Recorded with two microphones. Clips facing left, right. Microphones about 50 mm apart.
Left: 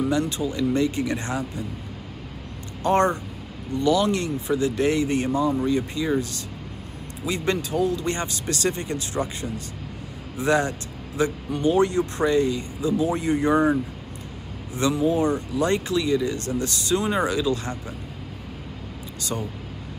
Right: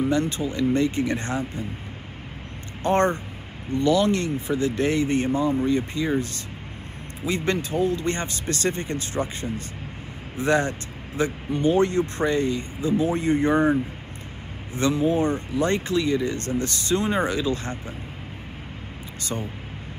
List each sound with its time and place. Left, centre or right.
0.0 s speech: right
2.8 s speech: right
14.7 s speech: right